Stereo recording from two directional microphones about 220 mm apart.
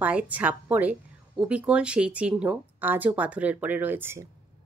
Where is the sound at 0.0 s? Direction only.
5° right (ahead or behind).